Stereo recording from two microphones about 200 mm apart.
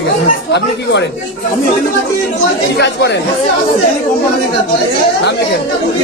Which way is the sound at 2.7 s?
55° left (ahead or behind).